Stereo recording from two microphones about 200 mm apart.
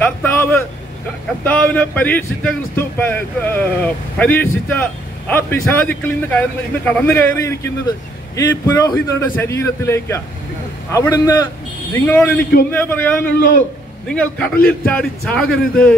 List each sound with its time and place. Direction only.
0.0 s speech: 10° left (ahead or behind)
11.9 s speech: 5° left (ahead or behind)